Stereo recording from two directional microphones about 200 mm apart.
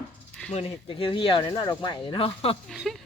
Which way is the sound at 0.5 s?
25° left (ahead or behind).